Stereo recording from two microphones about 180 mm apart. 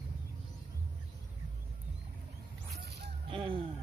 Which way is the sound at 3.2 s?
30° right (ahead or behind).